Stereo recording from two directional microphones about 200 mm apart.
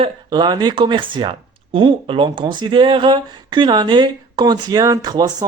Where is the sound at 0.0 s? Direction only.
20° right (ahead or behind).